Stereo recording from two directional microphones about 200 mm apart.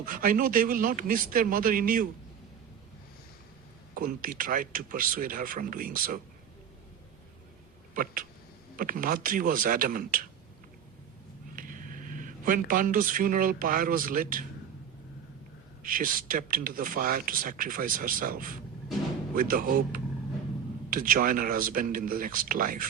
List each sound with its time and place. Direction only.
0.0 s speech: 45° right (ahead or behind)
3.9 s speech: 45° right (ahead or behind)
7.9 s speech: 45° right (ahead or behind)
11.5 s speech: 45° right (ahead or behind)
15.8 s speech: 45° right (ahead or behind)